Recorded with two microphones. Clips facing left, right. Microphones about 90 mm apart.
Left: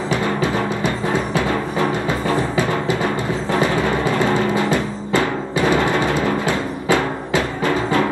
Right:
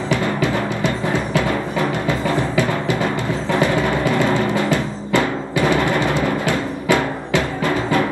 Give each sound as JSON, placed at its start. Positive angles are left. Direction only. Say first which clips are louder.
{"t": 1.3, "sound": "timpani", "louder": "even", "side_deg": 25}
{"t": 4.0, "sound": "music", "louder": "even", "side_deg": 25}
{"t": 5.6, "sound": "timpani", "louder": "even", "side_deg": 25}
{"t": 6.2, "sound": "music", "louder": "even", "side_deg": 25}